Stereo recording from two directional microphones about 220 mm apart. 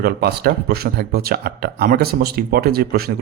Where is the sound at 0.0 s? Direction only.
45° right (ahead or behind).